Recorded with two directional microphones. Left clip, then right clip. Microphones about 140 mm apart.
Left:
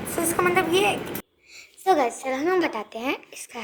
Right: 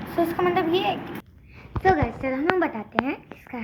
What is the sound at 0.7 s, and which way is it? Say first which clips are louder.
Speech: left 2 dB; 90° left.